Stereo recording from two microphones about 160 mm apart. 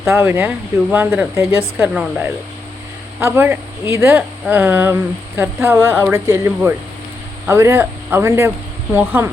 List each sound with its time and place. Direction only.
0.1 s speech: 15° right (ahead or behind)
1.9 s speech: centre (ahead or behind)
3.2 s speech: 15° right (ahead or behind)